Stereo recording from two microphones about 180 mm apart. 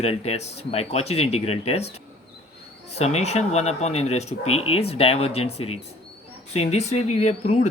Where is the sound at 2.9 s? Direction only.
35° left (ahead or behind).